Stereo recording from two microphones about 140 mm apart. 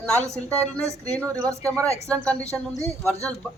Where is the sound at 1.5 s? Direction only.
20° right (ahead or behind).